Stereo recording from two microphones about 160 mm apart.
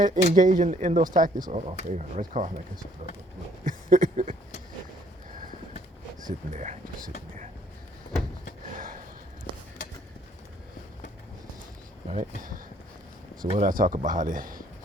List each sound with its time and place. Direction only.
0.0 s speech: 55° right (ahead or behind)
3.6 s a sound: 55° right (ahead or behind)
6.5 s speech: 50° right (ahead or behind)
12.1 s speech: 55° right (ahead or behind)
13.6 s speech: 55° right (ahead or behind)